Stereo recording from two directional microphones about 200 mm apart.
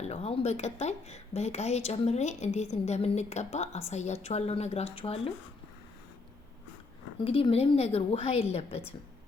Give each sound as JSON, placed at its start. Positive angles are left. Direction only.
{"t": 0.0, "sound": "a woman's voice", "side_deg": 30}
{"t": 7.3, "sound": "a woman's voice", "side_deg": 30}